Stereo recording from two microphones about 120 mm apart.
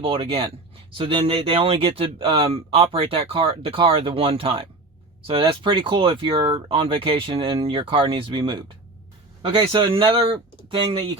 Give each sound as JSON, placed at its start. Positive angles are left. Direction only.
{"t": 0.0, "sound": "speech", "side_deg": -45}